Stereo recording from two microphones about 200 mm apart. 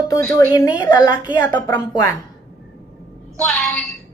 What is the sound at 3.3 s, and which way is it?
Speech, 5° left (ahead or behind).